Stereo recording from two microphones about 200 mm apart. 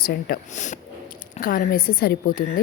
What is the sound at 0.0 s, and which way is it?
A woman's voice, 50° left (ahead or behind).